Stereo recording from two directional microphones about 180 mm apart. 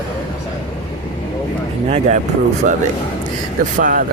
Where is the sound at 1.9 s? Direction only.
40° right (ahead or behind).